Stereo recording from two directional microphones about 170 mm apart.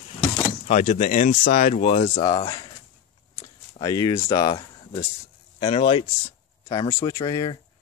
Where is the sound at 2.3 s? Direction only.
25° left (ahead or behind).